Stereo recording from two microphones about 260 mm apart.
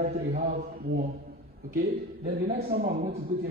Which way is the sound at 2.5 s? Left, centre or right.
Right.